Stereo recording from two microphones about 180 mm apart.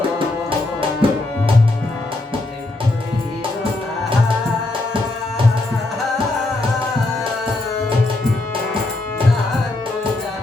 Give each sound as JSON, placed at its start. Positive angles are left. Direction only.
{"t": 1.0, "sound": "music", "side_deg": -30}